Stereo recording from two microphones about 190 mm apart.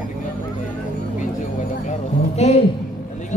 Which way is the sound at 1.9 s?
35° left (ahead or behind).